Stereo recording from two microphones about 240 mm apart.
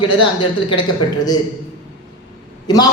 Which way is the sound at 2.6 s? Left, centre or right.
Centre.